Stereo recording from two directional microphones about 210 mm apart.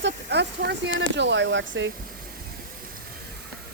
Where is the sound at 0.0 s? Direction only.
55° right (ahead or behind).